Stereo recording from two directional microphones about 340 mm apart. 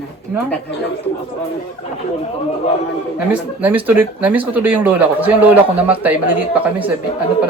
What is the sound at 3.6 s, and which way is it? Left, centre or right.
Speech, centre.